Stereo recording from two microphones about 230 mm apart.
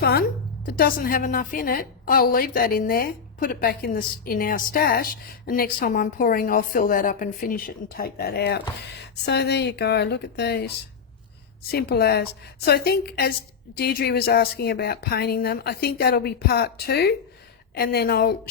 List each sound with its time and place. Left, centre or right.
0.0 s a woman's voice: left
11.7 s speech: left